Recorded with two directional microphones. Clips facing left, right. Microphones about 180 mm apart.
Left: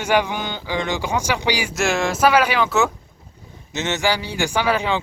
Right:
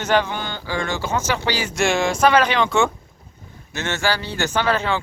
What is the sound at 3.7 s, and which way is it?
Speech, 20° left (ahead or behind).